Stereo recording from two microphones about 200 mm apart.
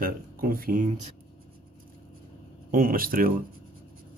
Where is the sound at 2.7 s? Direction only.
45° right (ahead or behind).